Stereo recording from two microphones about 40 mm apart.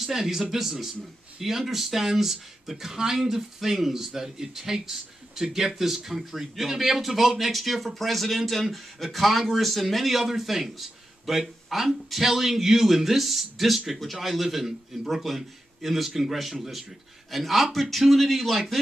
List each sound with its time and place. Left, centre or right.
0.0 s speech: centre